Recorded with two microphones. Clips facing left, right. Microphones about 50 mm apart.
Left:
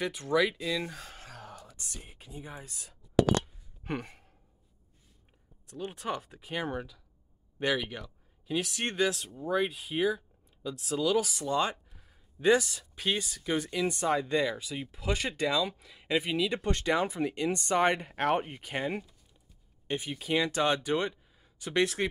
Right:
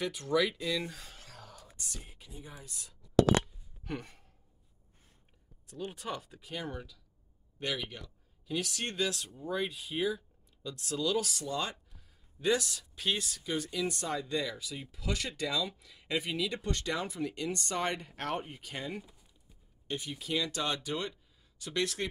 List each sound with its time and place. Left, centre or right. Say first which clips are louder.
0.0 s speech: left 2 dB; centre
0.9 s a sound: left 5 dB; left
1.8 s speech: left 1 dB; left
5.7 s speech: left 3 dB; left
9.1 s speech: left 5 dB; centre; by 10.2 s left
10.6 s speech: left 4 dB; centre
11.4 s speech: left 6 dB; left
13.4 s speech: left 4 dB; left